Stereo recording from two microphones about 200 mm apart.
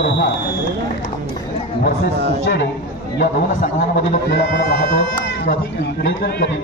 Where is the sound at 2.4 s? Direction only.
60° left (ahead or behind).